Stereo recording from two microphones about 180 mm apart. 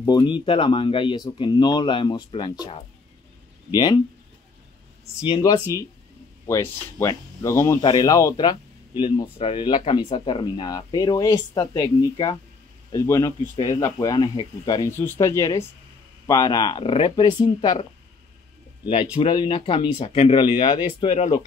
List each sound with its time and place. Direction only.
0.0 s speech: 25° left (ahead or behind)
3.7 s speech: 25° left (ahead or behind)
5.2 s speech: 25° left (ahead or behind)
14.9 s speech: 10° left (ahead or behind)
19.1 s speech: 25° left (ahead or behind)